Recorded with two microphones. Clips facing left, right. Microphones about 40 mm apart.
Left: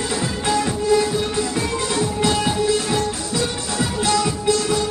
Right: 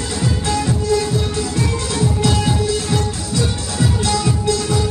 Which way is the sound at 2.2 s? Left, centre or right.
Centre.